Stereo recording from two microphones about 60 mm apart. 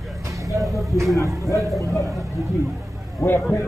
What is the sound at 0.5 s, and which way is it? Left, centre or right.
Speech, right.